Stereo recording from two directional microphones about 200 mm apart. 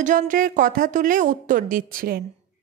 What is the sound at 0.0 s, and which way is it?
A woman's voice, 40° right (ahead or behind).